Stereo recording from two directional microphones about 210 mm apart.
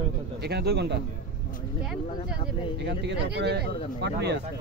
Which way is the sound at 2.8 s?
55° right (ahead or behind).